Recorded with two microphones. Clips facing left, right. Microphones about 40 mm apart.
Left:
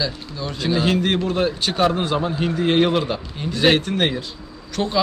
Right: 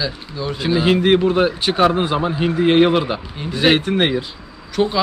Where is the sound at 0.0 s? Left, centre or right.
Centre.